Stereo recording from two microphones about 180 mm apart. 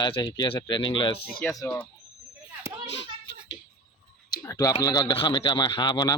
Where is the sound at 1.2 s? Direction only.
60° left (ahead or behind).